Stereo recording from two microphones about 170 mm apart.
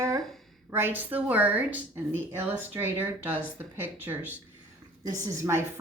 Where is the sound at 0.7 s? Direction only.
10° right (ahead or behind).